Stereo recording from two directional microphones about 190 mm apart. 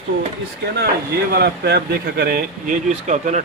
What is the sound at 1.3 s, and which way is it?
Speech, 55° right (ahead or behind).